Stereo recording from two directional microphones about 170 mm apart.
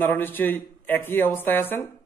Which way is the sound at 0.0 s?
10° left (ahead or behind).